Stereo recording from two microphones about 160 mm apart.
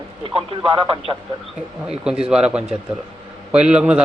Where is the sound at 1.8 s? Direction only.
5° right (ahead or behind).